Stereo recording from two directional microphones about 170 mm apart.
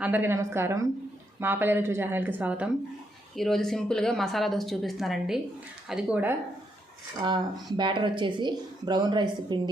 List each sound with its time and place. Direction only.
0.0 s speech: 10° right (ahead or behind)
7.8 s a woman's voice: 30° right (ahead or behind)